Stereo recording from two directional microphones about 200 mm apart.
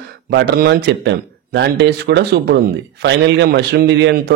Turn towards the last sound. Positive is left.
turn(degrees=-60)  # may be behind; listen again after turning